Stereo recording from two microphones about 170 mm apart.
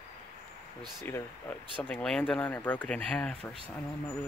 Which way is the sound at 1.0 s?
10° left (ahead or behind).